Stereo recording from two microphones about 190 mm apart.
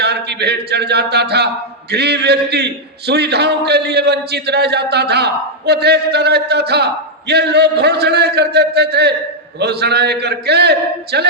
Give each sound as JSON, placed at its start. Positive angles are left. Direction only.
{"t": 0.0, "sound": "a man's voice", "side_deg": -60}